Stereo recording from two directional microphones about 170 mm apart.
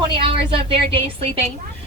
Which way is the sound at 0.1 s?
30° right (ahead or behind).